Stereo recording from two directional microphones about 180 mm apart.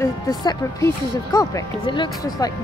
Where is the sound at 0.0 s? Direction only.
20° left (ahead or behind).